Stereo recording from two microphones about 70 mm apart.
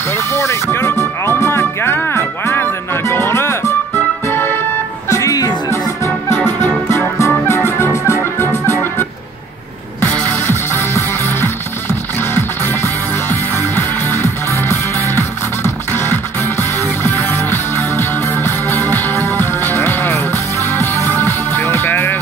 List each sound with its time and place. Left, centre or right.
0.1 s music: left
5.1 s music: left
5.7 s music: left
10.1 s music: right
10.7 s music: left